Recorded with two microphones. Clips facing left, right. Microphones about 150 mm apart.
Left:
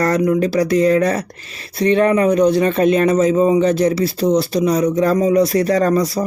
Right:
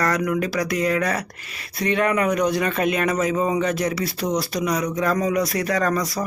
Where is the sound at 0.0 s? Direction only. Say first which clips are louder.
Left 7 dB; 30° left (ahead or behind).